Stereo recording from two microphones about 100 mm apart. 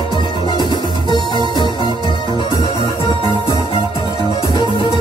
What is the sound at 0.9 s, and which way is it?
Music, 50° right (ahead or behind).